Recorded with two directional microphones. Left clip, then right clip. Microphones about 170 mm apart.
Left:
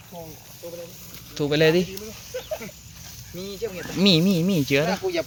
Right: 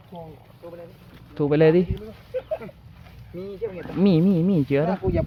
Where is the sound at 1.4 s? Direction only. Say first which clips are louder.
Right 2 dB; 25° right (ahead or behind).